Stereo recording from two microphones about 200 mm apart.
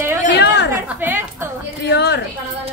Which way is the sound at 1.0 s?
10° right (ahead or behind).